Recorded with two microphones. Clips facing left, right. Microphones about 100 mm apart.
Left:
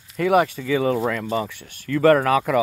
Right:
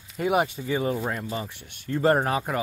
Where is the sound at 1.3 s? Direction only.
80° left.